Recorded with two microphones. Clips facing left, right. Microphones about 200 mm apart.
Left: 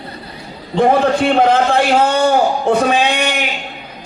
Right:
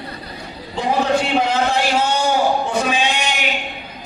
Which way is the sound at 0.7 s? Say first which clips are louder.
Left 6 dB; 55° left (ahead or behind).